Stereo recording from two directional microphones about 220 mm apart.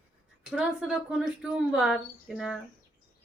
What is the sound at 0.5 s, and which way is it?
Speech, 5° right (ahead or behind).